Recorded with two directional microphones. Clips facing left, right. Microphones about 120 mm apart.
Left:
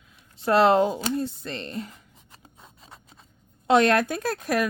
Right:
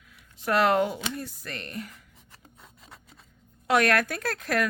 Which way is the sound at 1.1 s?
25° left (ahead or behind).